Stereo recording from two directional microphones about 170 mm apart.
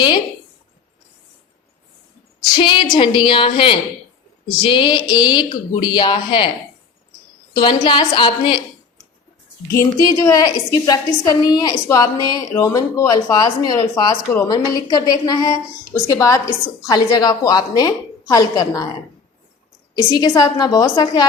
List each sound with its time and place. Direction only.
2.6 s speech: 30° left (ahead or behind)
7.5 s speech: 25° left (ahead or behind)
9.7 s speech: 15° left (ahead or behind)
20.1 s speech: 25° left (ahead or behind)